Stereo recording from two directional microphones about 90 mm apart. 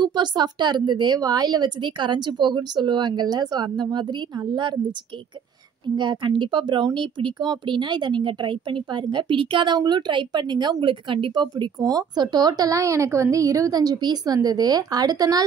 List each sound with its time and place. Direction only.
0.0 s speech: 55° right (ahead or behind)
5.9 s speech: 60° right (ahead or behind)
9.8 s speech: 55° right (ahead or behind)
10.8 s speech: 70° right (ahead or behind); by 15.4 s 45° right (ahead or behind)